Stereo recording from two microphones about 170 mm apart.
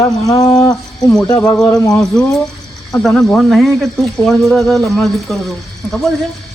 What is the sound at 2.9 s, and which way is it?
Speech, centre (ahead or behind).